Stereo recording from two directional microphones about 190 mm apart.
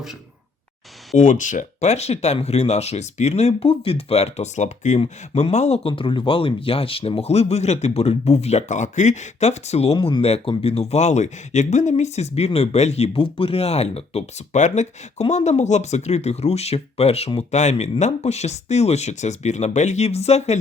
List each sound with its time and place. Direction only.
1.1 s speech: 40° left (ahead or behind)